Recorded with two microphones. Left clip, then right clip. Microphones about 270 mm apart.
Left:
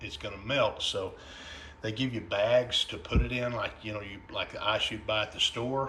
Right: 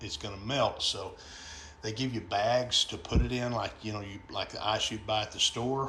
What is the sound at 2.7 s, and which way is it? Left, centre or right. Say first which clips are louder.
Speech: right 1 dB; centre.